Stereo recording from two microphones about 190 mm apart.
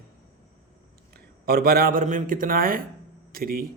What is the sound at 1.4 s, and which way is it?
Speech, 55° right (ahead or behind).